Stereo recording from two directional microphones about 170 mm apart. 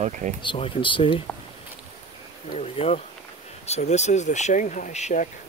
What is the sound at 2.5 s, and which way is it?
Speech, 40° left (ahead or behind).